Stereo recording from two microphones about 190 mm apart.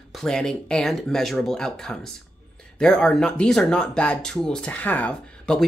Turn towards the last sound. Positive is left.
turn(degrees=5)  # may be behind; listen again after turning